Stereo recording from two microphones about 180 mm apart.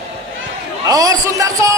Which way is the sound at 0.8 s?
20° right (ahead or behind).